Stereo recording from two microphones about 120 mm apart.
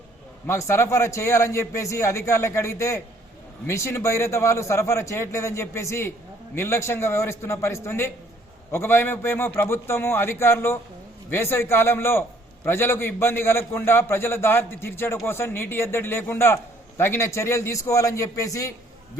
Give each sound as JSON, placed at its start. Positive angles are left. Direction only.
{"t": 0.4, "sound": "a man's voice", "side_deg": 20}